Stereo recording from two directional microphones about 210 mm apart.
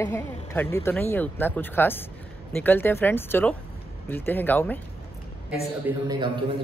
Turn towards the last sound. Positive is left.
turn(degrees=-20)  # may be behind; listen again after turning